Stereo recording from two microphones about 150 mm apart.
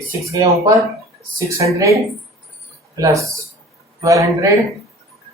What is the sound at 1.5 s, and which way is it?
Speech, 20° right (ahead or behind).